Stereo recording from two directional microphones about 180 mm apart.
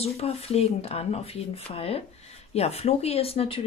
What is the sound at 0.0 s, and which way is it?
Speech, 35° left (ahead or behind).